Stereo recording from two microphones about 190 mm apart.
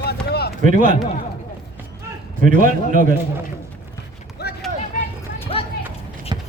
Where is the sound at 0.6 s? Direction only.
40° right (ahead or behind).